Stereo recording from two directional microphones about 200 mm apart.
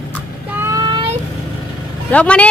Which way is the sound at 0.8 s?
20° right (ahead or behind).